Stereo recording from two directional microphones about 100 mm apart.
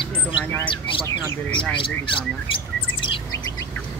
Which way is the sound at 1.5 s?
55° left (ahead or behind).